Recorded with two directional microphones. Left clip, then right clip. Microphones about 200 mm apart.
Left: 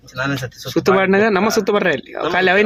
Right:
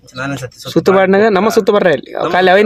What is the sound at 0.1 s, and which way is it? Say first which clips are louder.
Speech: even; 15° right (ahead or behind).